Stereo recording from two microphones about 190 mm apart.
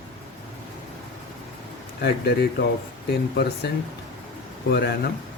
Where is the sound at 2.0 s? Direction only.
60° left (ahead or behind).